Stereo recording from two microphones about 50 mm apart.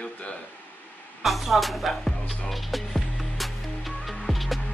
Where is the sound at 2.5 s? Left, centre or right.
Centre.